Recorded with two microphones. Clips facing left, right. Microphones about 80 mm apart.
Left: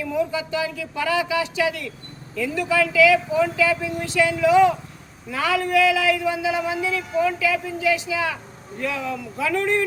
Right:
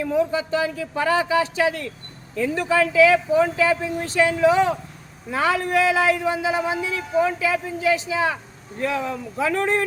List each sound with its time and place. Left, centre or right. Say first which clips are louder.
0.0 s a man's voice: right 3 dB; right